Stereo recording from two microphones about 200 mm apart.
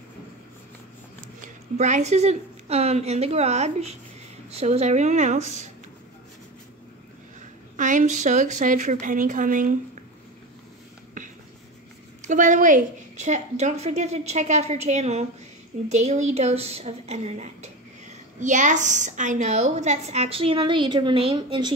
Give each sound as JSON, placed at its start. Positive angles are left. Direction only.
{"t": 1.8, "sound": "a woman's voice", "side_deg": -35}
{"t": 7.7, "sound": "a woman's voice", "side_deg": -40}
{"t": 12.3, "sound": "a woman's voice", "side_deg": -40}